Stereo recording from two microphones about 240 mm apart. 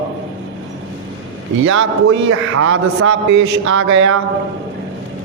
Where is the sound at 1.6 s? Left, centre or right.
Right.